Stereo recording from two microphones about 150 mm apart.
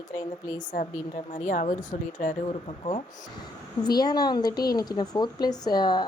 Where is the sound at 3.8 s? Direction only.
25° left (ahead or behind).